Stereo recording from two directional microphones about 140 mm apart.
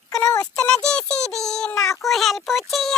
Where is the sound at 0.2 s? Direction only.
25° left (ahead or behind).